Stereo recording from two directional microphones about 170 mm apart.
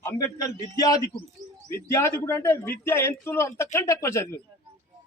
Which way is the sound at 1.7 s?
15° left (ahead or behind).